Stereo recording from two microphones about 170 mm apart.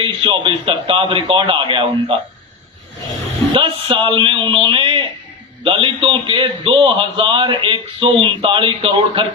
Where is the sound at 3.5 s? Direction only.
30° right (ahead or behind).